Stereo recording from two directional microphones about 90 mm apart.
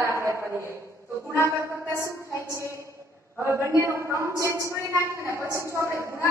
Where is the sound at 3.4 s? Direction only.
30° right (ahead or behind).